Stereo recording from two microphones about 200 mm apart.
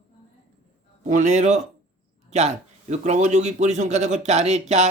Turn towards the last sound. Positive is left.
turn(degrees=-35)  # may be behind; listen again after turning